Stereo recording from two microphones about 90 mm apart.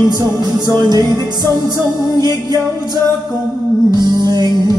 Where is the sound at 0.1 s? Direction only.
50° right (ahead or behind).